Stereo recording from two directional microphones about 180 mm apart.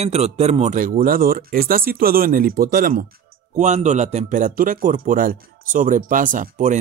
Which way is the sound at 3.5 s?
40° right (ahead or behind).